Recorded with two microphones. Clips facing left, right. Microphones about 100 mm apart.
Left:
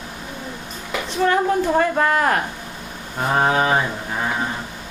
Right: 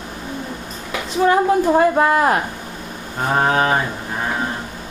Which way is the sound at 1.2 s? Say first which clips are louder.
Right 3 dB; 20° right (ahead or behind).